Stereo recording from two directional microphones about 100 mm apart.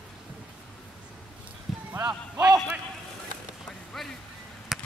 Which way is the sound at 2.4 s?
10° right (ahead or behind).